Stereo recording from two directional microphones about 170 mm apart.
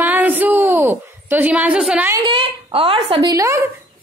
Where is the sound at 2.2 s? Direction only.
30° right (ahead or behind).